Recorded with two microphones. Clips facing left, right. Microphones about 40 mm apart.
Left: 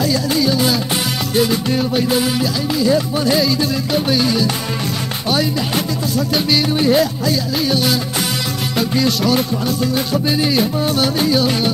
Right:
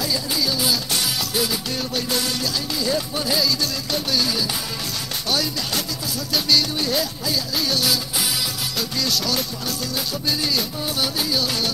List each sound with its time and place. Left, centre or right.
0.3 s music: left